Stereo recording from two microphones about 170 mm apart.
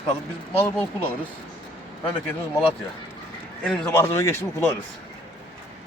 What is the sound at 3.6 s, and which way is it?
Speech, 5° left (ahead or behind).